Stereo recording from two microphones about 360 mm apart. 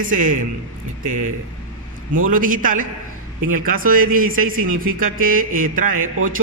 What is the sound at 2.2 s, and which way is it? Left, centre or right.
Speech, right.